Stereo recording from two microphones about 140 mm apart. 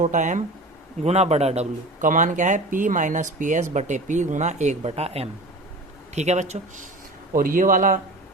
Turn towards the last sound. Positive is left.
turn(degrees=-70)  # may be behind; listen again after turning